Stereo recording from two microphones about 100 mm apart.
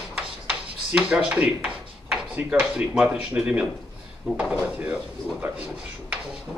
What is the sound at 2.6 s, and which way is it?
Speech, 10° right (ahead or behind).